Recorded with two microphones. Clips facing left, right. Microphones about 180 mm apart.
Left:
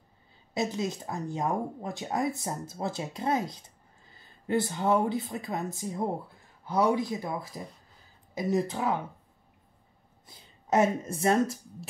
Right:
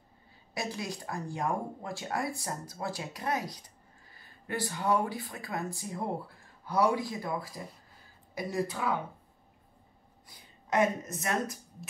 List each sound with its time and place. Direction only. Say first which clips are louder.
0.6 s speech: left 6 dB; 20° left (ahead or behind)
11.1 s speech: left 8 dB; 30° left (ahead or behind)